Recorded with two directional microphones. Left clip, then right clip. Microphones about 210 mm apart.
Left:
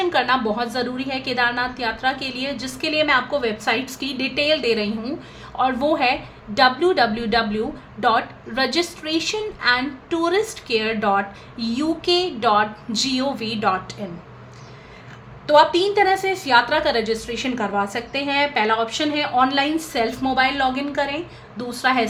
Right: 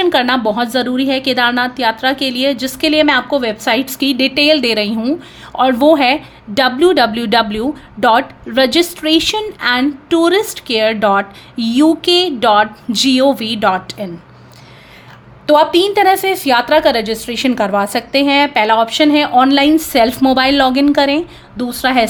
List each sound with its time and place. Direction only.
0.0 s a woman's voice: 40° right (ahead or behind)
15.4 s a woman's voice: 40° right (ahead or behind)